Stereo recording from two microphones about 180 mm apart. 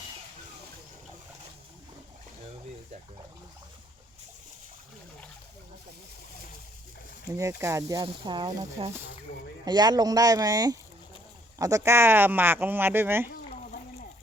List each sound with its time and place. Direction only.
7.3 s speech: 15° right (ahead or behind)